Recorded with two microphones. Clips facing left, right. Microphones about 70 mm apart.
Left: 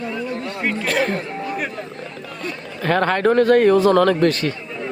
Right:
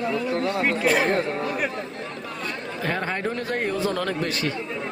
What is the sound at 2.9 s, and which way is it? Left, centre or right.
A man's voice, left.